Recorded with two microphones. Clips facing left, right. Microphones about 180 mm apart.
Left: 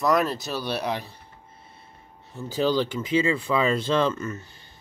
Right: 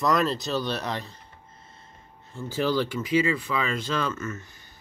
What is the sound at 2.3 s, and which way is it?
Speech, 15° left (ahead or behind).